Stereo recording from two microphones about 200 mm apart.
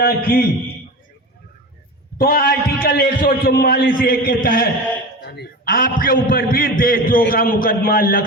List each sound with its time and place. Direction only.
0.0 s a man's voice: 50° left (ahead or behind)
2.1 s a man's voice: 50° left (ahead or behind)